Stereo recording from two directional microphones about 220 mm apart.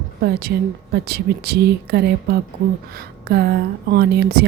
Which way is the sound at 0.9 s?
45° right (ahead or behind).